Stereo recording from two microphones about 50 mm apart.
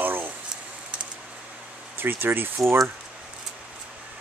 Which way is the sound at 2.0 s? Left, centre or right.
Right.